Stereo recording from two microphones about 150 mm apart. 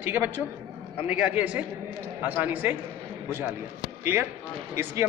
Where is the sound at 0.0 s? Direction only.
10° right (ahead or behind).